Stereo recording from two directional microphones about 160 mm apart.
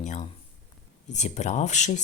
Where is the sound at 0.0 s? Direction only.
50° left (ahead or behind).